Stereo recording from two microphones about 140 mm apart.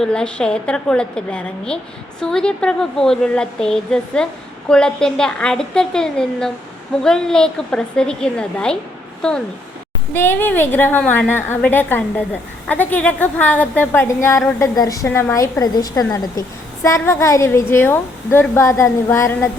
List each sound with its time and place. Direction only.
0.0 s a woman's voice: 5° left (ahead or behind)
10.1 s a woman's voice: 15° left (ahead or behind)